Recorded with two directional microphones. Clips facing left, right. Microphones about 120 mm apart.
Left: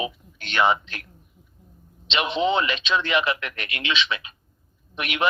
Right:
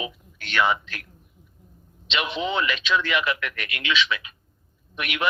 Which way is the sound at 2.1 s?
25° left (ahead or behind).